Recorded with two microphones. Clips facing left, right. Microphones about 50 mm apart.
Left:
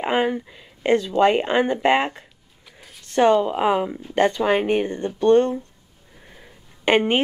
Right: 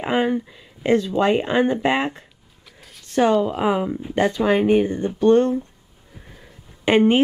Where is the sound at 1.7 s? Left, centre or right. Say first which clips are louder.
Left 1 dB; left.